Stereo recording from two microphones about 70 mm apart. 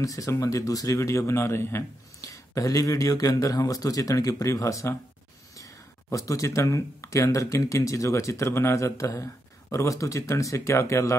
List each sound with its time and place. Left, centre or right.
0.0 s speech: left
0.9 s a man's voice: left
2.2 s speech: left
6.1 s speech: left